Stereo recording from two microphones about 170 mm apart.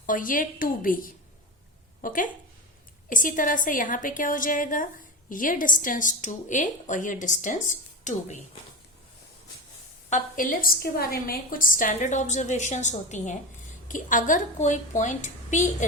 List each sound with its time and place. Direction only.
0.0 s a woman's voice: 50° left (ahead or behind)
10.1 s a woman's voice: 55° left (ahead or behind)